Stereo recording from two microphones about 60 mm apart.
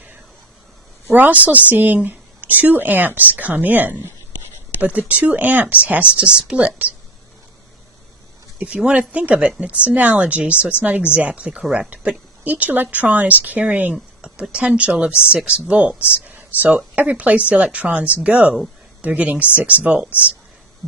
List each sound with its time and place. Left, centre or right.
1.1 s speech: right
8.5 s speech: right